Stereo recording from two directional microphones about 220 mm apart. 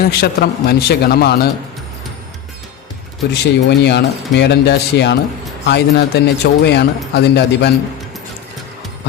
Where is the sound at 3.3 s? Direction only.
50° left (ahead or behind).